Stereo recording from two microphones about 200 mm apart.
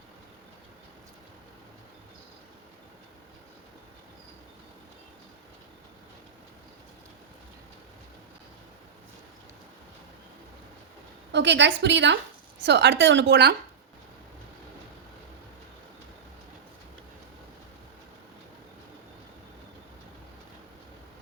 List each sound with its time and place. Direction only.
11.3 s a woman's voice: 60° right (ahead or behind)